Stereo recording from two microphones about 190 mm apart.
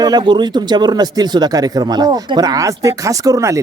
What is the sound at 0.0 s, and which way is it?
A woman's voice, 20° right (ahead or behind).